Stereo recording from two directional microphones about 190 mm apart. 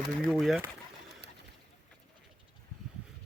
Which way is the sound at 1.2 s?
60° right (ahead or behind).